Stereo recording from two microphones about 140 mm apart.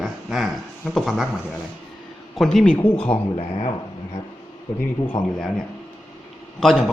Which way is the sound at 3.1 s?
45° left (ahead or behind).